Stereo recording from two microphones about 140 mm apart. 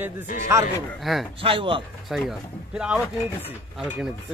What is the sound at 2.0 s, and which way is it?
Speech, centre (ahead or behind).